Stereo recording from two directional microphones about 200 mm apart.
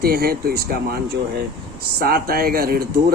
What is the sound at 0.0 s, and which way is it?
Speech, 50° right (ahead or behind).